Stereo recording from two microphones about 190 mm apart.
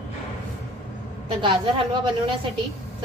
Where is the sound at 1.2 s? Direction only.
25° right (ahead or behind).